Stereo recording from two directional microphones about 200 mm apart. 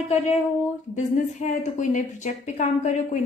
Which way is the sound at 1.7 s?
40° left (ahead or behind).